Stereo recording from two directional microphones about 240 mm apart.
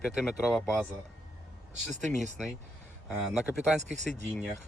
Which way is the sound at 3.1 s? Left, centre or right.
Centre.